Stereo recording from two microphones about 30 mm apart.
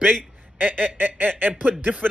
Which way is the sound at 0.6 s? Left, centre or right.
Right.